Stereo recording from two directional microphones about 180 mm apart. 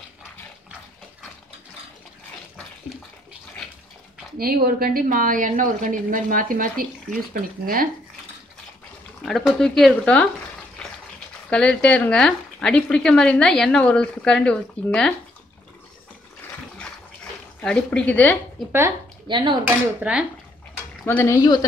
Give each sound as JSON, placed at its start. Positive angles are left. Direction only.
{"t": 4.4, "sound": "a woman's voice", "side_deg": -55}
{"t": 9.2, "sound": "speech", "side_deg": 0}
{"t": 10.8, "sound": "bathtub", "side_deg": 5}
{"t": 11.5, "sound": "speech", "side_deg": 5}
{"t": 16.7, "sound": "a sound", "side_deg": 5}
{"t": 18.7, "sound": "dishes", "side_deg": -15}
{"t": 19.2, "sound": "speech", "side_deg": -25}
{"t": 19.6, "sound": "dishes", "side_deg": -5}
{"t": 21.0, "sound": "speech", "side_deg": 15}